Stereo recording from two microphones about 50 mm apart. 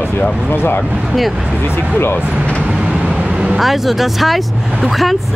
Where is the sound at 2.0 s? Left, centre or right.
Left.